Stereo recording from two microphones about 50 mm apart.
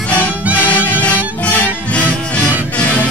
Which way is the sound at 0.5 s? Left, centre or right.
Left.